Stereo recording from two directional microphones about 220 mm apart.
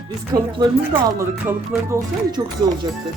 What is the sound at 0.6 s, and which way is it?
Speech, 15° right (ahead or behind).